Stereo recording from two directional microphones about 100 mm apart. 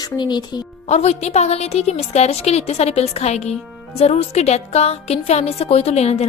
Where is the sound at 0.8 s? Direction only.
90° left.